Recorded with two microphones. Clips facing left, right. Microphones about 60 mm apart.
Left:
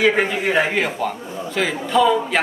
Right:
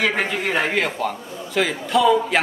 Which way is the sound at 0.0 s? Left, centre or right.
Centre.